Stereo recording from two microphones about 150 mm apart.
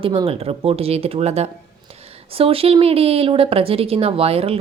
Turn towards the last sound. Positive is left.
turn(degrees=-40)  # may be behind; listen again after turning